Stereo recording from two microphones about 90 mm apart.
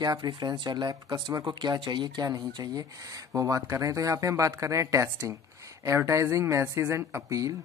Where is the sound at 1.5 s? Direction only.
55° right (ahead or behind).